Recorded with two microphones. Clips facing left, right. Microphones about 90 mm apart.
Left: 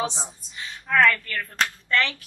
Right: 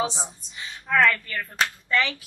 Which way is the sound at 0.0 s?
Centre (ahead or behind).